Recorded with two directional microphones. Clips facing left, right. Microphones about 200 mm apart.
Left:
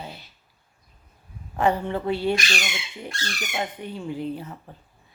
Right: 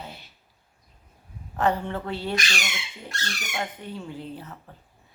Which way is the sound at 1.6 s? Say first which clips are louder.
Left 2 dB; 10° left (ahead or behind).